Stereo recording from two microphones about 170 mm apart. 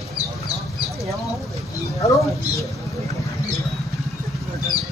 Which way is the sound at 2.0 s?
20° left (ahead or behind).